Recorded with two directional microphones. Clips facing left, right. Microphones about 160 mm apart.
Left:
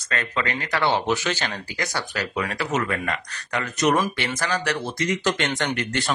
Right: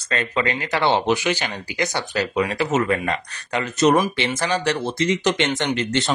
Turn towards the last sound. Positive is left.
turn(degrees=-25)  # may be behind; listen again after turning